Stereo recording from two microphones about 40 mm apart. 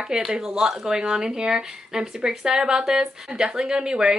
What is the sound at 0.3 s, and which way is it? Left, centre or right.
Speech, centre.